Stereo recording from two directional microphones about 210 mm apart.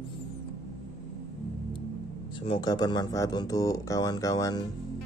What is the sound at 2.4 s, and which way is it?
Speech, 25° left (ahead or behind).